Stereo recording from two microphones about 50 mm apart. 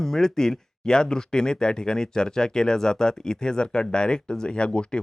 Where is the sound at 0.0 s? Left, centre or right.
Centre.